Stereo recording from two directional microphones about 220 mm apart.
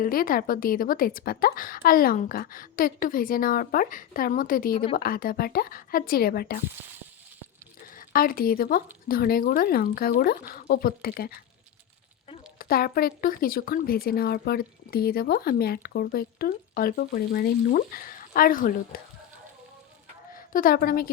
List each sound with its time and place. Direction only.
0.0 s a woman's voice: 40° left (ahead or behind)
7.9 s a woman's voice: 40° left (ahead or behind)
12.5 s a woman's voice: 40° left (ahead or behind)
20.3 s a woman's voice: 40° left (ahead or behind)